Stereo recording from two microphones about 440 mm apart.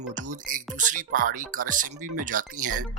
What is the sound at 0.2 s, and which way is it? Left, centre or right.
Speech, centre.